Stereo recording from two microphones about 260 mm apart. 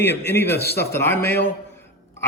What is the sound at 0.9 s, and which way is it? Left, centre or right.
Speech, centre.